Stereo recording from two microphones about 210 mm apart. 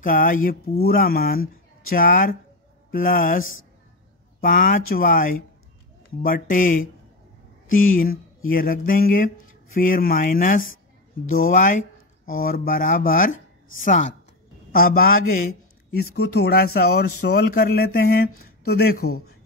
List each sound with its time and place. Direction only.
0.0 s speech: 40° left (ahead or behind)